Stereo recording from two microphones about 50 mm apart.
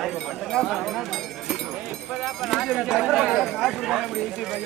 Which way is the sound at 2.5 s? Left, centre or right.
Centre.